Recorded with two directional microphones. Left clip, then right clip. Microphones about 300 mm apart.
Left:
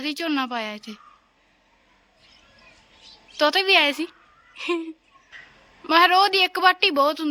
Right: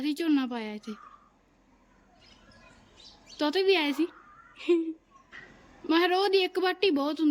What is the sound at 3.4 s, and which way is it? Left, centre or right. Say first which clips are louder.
Speech: left 8 dB; centre.